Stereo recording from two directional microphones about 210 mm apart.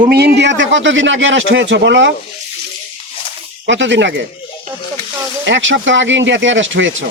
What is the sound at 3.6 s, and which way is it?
Speech, 60° right (ahead or behind).